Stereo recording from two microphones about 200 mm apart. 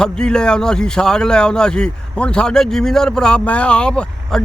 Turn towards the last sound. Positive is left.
turn(degrees=5)  # may be behind; listen again after turning